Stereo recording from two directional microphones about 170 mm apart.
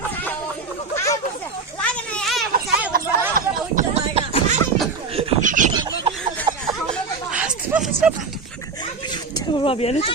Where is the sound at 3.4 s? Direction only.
45° right (ahead or behind).